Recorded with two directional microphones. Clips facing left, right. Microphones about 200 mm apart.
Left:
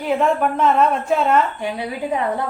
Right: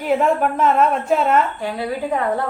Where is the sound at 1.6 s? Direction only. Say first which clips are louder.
Right 1 dB; 15° left (ahead or behind).